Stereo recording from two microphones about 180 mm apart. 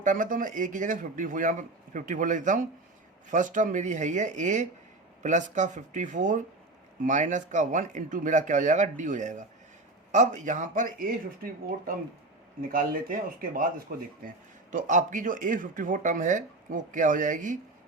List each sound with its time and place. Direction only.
0.0 s speech: 45° right (ahead or behind)